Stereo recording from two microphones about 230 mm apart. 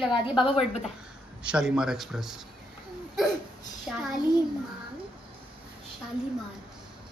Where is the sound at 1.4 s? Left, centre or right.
Centre.